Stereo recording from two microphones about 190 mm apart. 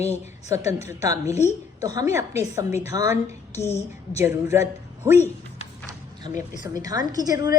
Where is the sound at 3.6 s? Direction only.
15° left (ahead or behind).